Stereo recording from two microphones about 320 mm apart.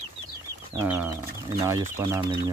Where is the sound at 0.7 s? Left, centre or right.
Centre.